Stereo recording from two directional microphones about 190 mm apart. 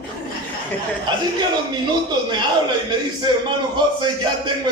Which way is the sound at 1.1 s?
25° right (ahead or behind).